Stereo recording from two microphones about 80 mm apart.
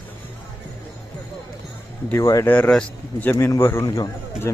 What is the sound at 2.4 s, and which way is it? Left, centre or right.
Speech, left.